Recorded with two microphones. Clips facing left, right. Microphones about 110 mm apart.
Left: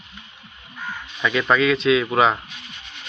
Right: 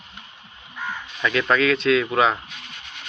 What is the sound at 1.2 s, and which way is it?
Speech, 5° left (ahead or behind).